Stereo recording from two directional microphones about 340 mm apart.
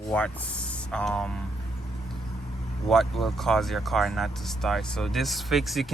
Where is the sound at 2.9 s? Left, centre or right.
Centre.